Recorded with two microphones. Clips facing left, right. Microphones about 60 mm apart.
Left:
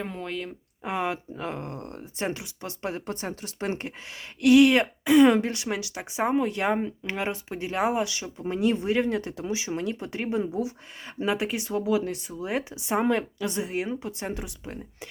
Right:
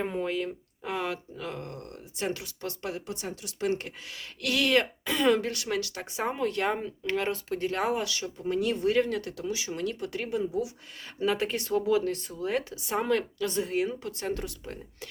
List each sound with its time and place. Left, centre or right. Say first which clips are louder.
0.0 s speech: right 3 dB; centre
0.8 s speech: left 4 dB; left
2.9 s speech: left 3 dB; left
11.3 s speech: left 1 dB; centre